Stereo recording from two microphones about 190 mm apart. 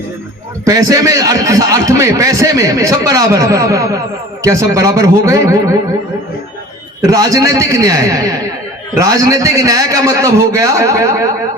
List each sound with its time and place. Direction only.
0.6 s a man's voice: 20° right (ahead or behind)
7.0 s a man's voice: 20° right (ahead or behind)